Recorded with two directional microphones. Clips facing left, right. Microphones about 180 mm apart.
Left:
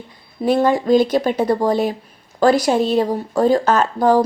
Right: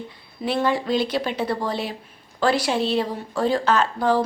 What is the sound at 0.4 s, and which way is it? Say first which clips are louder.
A woman's voice: left 7 dB; 45° left (ahead or behind).